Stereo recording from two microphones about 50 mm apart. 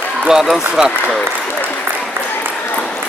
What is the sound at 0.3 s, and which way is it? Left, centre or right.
Speech, centre.